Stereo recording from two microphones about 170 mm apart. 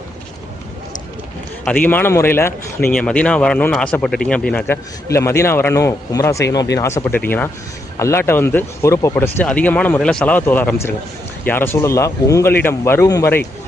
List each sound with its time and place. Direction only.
1.6 s speech: 10° left (ahead or behind)